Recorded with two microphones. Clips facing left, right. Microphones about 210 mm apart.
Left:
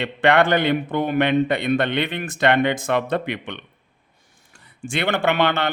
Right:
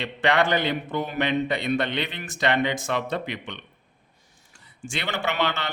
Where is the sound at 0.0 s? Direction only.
55° left (ahead or behind).